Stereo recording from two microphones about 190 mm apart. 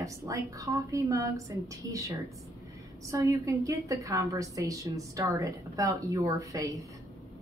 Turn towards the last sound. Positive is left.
turn(degrees=-20)  # may be behind; listen again after turning